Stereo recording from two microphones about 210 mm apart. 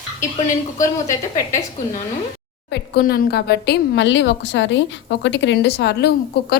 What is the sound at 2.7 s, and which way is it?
Speech, 50° left (ahead or behind).